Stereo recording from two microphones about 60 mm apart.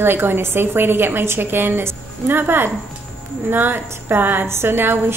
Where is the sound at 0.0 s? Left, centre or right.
Right.